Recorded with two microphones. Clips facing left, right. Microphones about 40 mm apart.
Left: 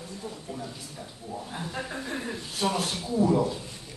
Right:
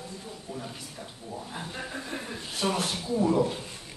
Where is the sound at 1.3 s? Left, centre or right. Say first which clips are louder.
Left 2 dB; centre.